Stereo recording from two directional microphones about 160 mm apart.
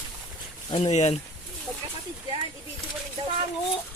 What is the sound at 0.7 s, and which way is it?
Speech, 40° left (ahead or behind).